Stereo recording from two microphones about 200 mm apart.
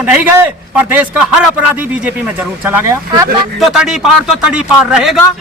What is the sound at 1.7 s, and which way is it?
A man's voice, 10° right (ahead or behind).